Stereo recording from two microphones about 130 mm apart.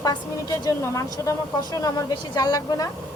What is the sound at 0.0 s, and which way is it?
A woman's voice, 30° left (ahead or behind).